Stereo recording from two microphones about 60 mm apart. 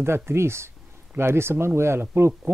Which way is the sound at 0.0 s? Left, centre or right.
Right.